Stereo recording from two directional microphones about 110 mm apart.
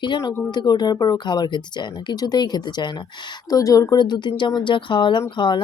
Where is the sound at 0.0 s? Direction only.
45° left (ahead or behind).